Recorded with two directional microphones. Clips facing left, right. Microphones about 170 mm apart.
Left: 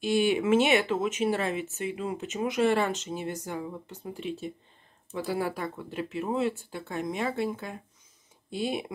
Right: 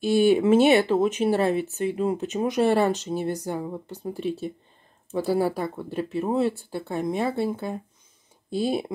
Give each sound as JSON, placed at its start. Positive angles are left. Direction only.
{"t": 0.1, "sound": "speech", "side_deg": -35}